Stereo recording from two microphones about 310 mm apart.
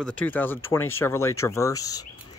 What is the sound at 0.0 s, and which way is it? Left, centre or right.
Speech, centre.